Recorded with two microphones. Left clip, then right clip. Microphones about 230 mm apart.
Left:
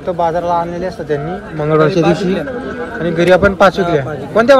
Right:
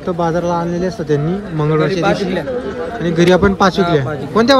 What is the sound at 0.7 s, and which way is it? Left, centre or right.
A man's voice, centre.